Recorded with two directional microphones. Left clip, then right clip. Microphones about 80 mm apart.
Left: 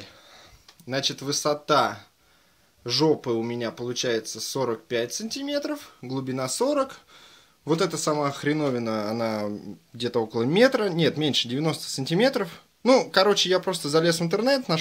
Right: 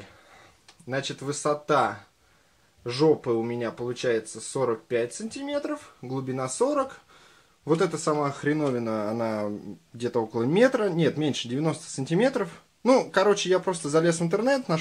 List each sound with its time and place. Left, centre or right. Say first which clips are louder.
0.8 s speech: left 3 dB; left
2.9 s speech: even; left
6.2 s speech: left 1 dB; centre